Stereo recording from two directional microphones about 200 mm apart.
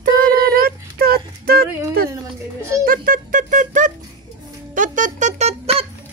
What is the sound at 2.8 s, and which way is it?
Speech, 45° right (ahead or behind).